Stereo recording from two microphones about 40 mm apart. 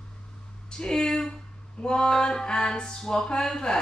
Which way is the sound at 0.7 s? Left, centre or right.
Centre.